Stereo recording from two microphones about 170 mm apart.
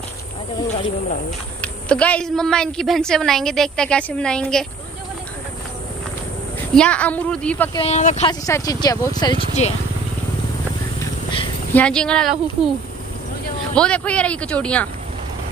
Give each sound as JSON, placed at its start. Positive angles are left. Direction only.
{"t": 1.6, "sound": "a woman's voice", "side_deg": 10}
{"t": 6.7, "sound": "a man's voice", "side_deg": 5}
{"t": 7.7, "sound": "speech", "side_deg": 40}
{"t": 8.3, "sound": "speech", "side_deg": 20}
{"t": 11.7, "sound": "a woman's voice", "side_deg": 5}
{"t": 13.7, "sound": "a man's voice", "side_deg": 5}